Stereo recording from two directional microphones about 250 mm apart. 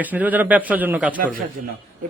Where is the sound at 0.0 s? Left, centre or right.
Centre.